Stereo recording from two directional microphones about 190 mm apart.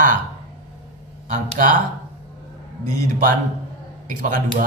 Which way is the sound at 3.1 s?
40° right (ahead or behind).